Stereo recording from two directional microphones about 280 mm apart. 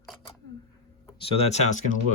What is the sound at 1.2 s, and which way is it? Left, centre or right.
Speech, left.